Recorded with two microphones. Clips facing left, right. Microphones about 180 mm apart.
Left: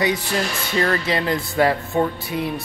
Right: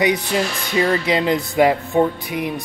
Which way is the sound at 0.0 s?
15° right (ahead or behind).